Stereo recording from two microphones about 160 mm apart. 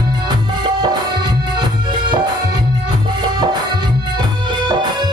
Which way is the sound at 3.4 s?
25° right (ahead or behind).